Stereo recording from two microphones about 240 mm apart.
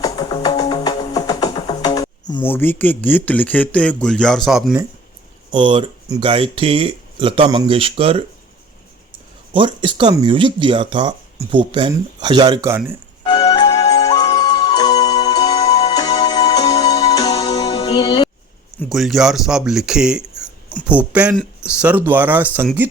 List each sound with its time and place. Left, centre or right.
0.0 s music: centre
2.3 s speech: centre
5.5 s speech: centre
9.5 s speech: right
13.2 s music: left
18.8 s speech: centre